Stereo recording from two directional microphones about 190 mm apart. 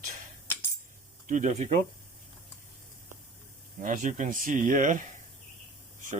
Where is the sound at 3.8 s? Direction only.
45° right (ahead or behind).